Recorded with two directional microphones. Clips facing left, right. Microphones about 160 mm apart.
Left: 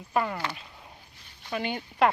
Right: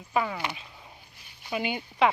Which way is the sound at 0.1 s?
Centre (ahead or behind).